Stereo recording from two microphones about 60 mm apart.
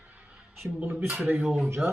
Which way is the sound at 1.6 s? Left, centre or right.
Right.